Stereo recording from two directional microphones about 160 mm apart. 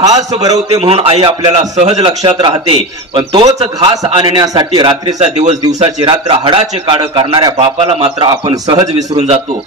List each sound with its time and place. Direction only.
0.0 s a man's voice: 20° right (ahead or behind)
0.5 s a man's voice: 40° right (ahead or behind)
2.0 s a man's voice: 30° right (ahead or behind)
3.4 s a man's voice: 45° right (ahead or behind)
4.0 s a man's voice: 30° right (ahead or behind)
5.2 s a man's voice: 45° right (ahead or behind)